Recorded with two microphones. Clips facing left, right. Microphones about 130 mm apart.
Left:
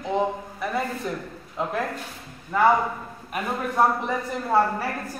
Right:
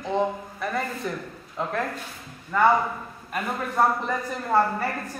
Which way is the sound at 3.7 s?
5° left (ahead or behind).